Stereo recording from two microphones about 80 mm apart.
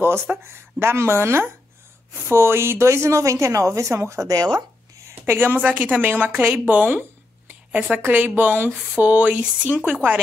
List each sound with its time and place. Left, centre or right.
0.0 s a woman's voice: right
5.2 s speech: right